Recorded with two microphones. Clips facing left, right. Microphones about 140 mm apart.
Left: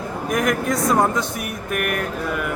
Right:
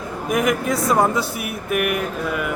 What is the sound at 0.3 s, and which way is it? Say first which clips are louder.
Speech: right 1 dB; 5° right (ahead or behind).